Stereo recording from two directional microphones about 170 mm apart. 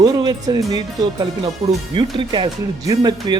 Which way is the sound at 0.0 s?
25° right (ahead or behind).